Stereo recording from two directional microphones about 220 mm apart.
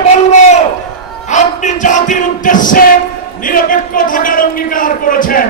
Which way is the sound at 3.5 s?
40° left (ahead or behind).